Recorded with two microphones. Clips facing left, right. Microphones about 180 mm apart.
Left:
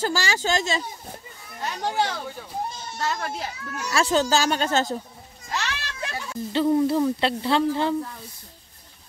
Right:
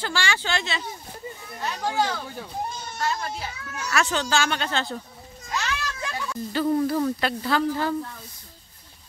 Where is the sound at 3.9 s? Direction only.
35° left (ahead or behind).